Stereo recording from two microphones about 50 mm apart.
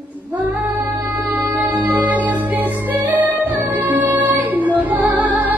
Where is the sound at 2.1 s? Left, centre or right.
Right.